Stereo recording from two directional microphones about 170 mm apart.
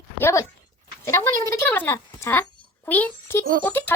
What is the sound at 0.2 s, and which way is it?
Speech, 15° left (ahead or behind).